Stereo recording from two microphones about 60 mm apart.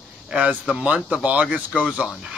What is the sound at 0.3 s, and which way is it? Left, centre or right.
Speech, centre.